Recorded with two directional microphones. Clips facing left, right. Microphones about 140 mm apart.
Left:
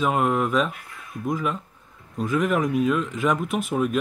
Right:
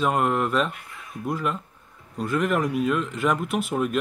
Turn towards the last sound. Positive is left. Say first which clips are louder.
# left 1 dB
turn(degrees=0)  # may be behind; listen again after turning